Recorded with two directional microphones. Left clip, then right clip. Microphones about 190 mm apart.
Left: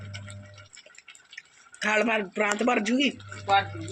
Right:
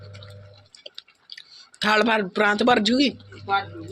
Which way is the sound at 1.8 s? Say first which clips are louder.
Right 5 dB; 30° right (ahead or behind).